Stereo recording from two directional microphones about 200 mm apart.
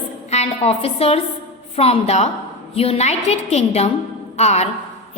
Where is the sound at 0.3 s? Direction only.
30° left (ahead or behind).